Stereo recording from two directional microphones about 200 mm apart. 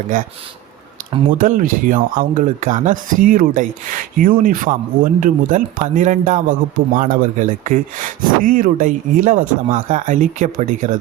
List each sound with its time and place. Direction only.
1.3 s speech: 40° right (ahead or behind)